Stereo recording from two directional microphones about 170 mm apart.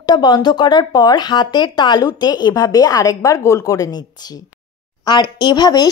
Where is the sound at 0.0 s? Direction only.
25° left (ahead or behind).